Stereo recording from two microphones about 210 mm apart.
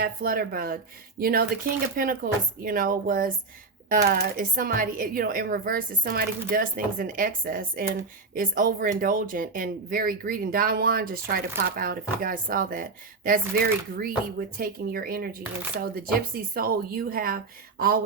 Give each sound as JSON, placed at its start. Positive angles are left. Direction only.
{"t": 0.0, "sound": "speech", "side_deg": -45}